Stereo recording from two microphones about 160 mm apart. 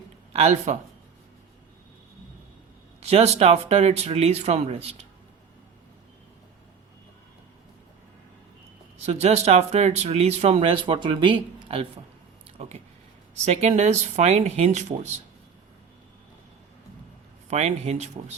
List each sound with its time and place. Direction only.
0.3 s speech: 45° right (ahead or behind)
3.0 s speech: 40° right (ahead or behind)
9.0 s speech: 40° right (ahead or behind)
13.3 s speech: 45° right (ahead or behind)
17.5 s speech: 45° right (ahead or behind)